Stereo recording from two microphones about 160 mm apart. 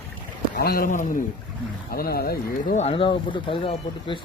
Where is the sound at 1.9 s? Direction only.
70° left (ahead or behind).